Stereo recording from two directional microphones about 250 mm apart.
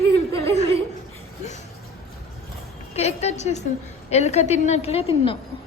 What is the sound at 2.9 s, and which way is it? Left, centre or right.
A woman's voice, left.